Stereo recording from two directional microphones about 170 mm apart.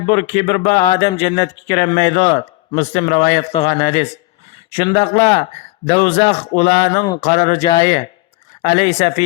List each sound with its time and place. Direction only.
0.0 s a man's voice: 30° left (ahead or behind)